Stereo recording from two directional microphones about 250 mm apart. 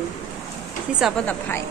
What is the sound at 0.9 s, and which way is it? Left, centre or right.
Speech, centre.